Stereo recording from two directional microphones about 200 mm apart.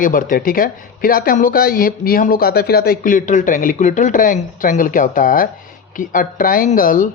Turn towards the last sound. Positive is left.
turn(degrees=40)  # may be behind; listen again after turning